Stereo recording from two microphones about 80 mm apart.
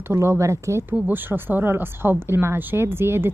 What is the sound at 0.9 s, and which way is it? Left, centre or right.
Speech, right.